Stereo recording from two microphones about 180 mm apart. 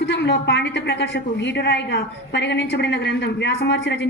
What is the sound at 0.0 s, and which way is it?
A woman's voice, 75° left (ahead or behind).